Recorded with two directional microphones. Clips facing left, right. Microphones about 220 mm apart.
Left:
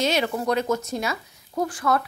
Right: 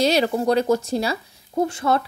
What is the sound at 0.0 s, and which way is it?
Speech, 35° right (ahead or behind).